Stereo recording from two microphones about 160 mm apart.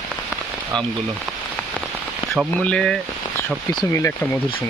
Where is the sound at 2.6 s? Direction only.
5° left (ahead or behind).